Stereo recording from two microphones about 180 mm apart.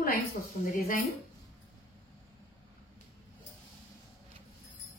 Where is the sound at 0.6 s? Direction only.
50° left (ahead or behind).